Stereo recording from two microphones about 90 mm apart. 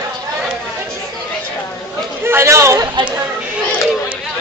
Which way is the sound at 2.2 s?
30° right (ahead or behind).